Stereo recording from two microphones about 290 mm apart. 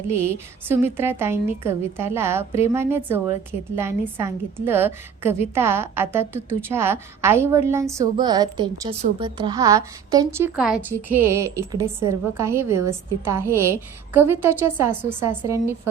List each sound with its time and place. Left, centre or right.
0.1 s a woman's voice: centre